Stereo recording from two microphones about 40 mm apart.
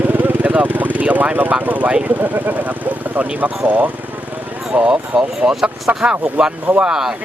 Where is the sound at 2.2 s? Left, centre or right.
Right.